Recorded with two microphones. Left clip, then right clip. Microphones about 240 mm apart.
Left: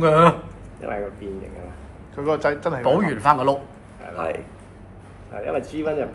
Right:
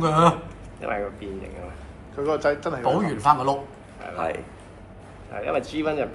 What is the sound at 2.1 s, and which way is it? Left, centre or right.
Speech, left.